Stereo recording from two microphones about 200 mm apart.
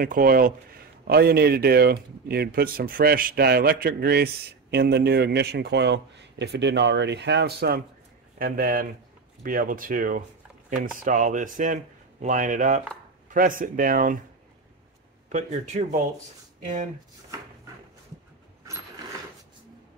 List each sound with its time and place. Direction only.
0.0 s speech: 45° right (ahead or behind)
15.3 s speech: 35° right (ahead or behind)